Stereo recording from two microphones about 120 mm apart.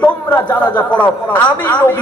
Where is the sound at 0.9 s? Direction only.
10° left (ahead or behind).